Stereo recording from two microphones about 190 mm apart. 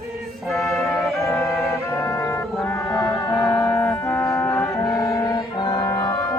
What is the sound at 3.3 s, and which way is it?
Music, centre (ahead or behind).